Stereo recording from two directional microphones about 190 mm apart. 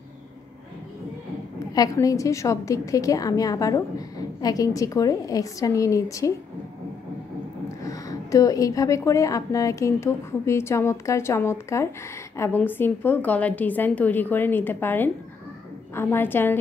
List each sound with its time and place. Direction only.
1.8 s a woman's voice: 15° left (ahead or behind)
7.8 s a woman's voice: 15° left (ahead or behind)